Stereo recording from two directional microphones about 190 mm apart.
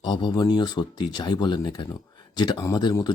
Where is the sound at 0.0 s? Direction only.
25° left (ahead or behind).